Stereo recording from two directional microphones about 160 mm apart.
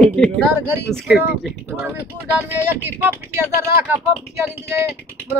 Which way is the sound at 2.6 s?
15° right (ahead or behind).